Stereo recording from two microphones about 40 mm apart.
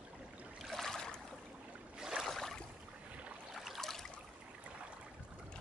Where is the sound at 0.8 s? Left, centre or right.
Centre.